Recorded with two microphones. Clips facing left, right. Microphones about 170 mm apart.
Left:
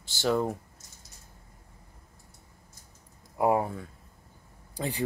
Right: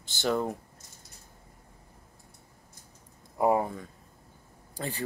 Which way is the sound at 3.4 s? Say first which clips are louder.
Even; 5° left (ahead or behind).